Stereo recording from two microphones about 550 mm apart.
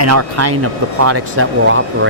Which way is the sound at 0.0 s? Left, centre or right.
Right.